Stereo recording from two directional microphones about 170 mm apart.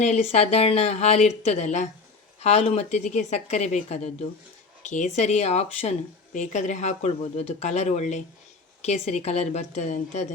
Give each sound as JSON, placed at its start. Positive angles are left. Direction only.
{"t": 0.3, "sound": "speech", "side_deg": 40}